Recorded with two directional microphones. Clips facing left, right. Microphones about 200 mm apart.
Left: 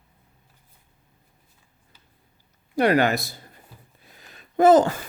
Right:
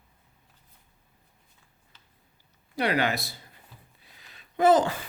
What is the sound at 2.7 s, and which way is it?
Speech, 45° left (ahead or behind).